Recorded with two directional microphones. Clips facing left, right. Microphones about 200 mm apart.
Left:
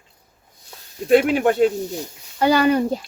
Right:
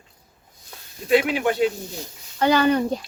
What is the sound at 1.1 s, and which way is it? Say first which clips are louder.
Speech: left 4 dB; 50° left (ahead or behind).